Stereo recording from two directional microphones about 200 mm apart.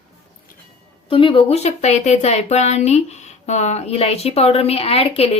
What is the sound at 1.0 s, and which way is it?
A woman's voice, 25° left (ahead or behind).